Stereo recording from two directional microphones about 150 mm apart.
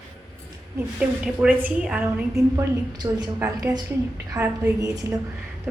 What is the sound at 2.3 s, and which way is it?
A woman's voice, 25° right (ahead or behind).